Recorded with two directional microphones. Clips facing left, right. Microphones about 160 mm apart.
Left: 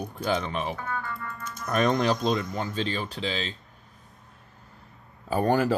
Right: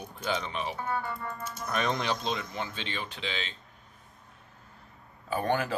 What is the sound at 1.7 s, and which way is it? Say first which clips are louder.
Speech: left 7 dB; 45° left (ahead or behind).